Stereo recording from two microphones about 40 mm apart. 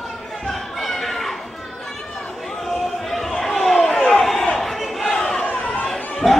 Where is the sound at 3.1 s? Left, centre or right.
Centre.